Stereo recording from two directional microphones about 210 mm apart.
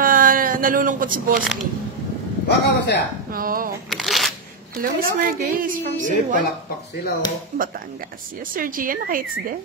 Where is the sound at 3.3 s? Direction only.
40° right (ahead or behind).